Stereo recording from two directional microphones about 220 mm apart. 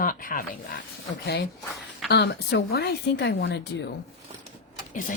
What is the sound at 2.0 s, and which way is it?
A woman's voice, 50° left (ahead or behind).